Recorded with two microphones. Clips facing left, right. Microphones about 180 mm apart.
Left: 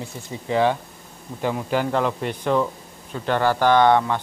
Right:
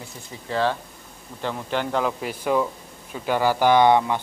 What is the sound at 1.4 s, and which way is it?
Speech, 5° left (ahead or behind).